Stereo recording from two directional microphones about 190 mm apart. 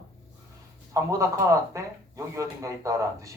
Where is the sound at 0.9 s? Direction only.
15° right (ahead or behind).